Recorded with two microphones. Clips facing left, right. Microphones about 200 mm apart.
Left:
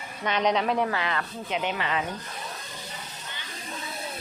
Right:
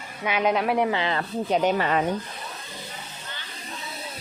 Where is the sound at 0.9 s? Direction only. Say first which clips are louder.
Right 4 dB; 30° right (ahead or behind); by 2.0 s 45° right (ahead or behind).